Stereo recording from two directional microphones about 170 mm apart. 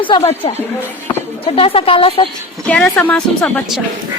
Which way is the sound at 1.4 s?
35° left (ahead or behind).